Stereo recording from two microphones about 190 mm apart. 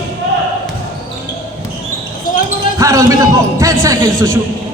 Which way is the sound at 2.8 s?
15° right (ahead or behind).